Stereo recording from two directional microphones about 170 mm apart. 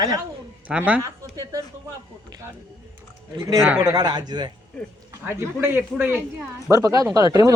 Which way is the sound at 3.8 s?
25° right (ahead or behind).